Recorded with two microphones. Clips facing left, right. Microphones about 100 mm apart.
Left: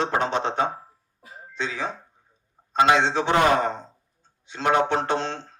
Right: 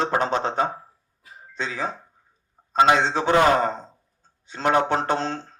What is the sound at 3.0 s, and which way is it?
Speech, 40° right (ahead or behind).